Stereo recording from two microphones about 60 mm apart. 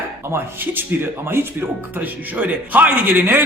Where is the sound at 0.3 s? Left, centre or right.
Right.